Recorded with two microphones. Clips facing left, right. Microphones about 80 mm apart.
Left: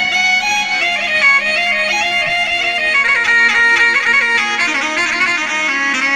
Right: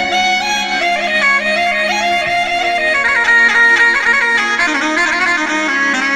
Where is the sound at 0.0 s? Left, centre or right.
Right.